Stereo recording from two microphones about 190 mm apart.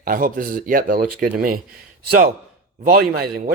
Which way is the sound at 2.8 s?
50° right (ahead or behind).